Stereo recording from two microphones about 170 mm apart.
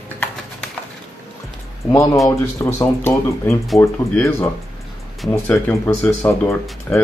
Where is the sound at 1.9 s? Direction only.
20° left (ahead or behind).